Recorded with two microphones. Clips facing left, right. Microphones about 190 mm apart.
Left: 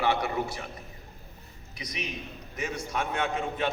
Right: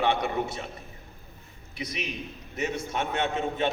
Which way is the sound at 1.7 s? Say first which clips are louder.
Right 3 dB; 25° right (ahead or behind).